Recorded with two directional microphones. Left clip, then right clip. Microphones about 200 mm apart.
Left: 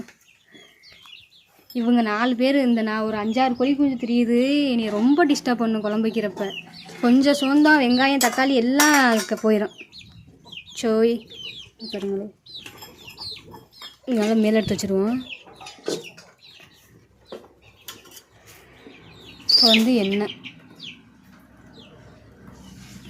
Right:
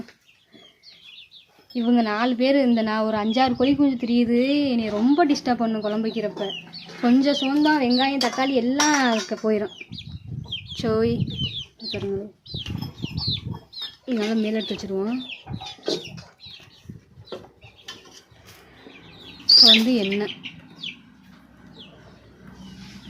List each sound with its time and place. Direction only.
1.7 s speech: centre (ahead or behind)
10.8 s speech: 10° left (ahead or behind)
14.0 s speech: 15° left (ahead or behind)
14.5 s speech: 30° left (ahead or behind)
19.6 s speech: 10° left (ahead or behind)